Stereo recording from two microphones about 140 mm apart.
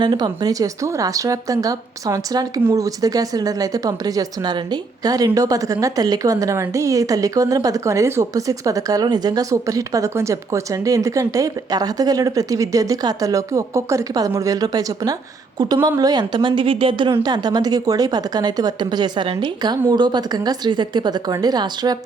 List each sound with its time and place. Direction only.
0.0 s a woman's voice: 30° right (ahead or behind)